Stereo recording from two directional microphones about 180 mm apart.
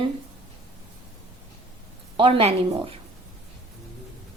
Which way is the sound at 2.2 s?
35° right (ahead or behind).